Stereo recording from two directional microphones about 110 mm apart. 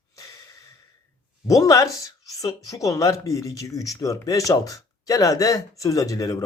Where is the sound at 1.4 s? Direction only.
30° left (ahead or behind).